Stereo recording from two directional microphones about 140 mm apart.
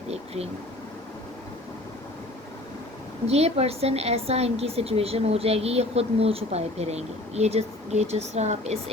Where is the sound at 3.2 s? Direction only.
50° right (ahead or behind).